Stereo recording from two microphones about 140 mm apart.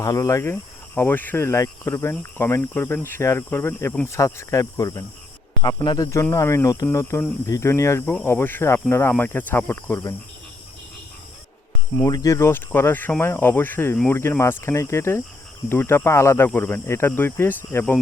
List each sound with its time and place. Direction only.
0.0 s speech: 20° left (ahead or behind)
12.0 s speech: 25° left (ahead or behind)